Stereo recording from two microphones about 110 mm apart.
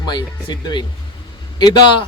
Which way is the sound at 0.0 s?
40° left (ahead or behind).